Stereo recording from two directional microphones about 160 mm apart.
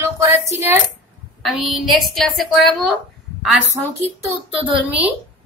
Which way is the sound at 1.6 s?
Centre (ahead or behind).